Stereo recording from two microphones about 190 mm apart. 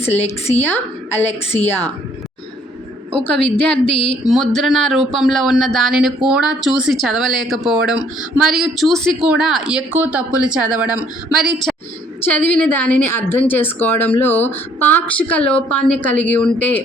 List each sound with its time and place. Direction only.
0.6 s a woman's voice: 10° left (ahead or behind)
1.3 s a woman's voice: 35° left (ahead or behind)
1.6 s a woman's voice: 10° left (ahead or behind)
3.2 s speech: 5° left (ahead or behind)
3.9 s speech: 30° left (ahead or behind)
4.3 s speech: centre (ahead or behind)
11.7 s a sound: centre (ahead or behind)
12.2 s a woman's voice: 10° left (ahead or behind)